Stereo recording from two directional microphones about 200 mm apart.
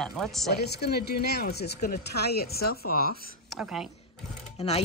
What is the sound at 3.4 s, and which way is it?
Speech, centre (ahead or behind).